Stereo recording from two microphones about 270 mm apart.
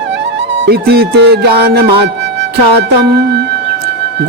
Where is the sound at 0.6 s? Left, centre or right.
Right.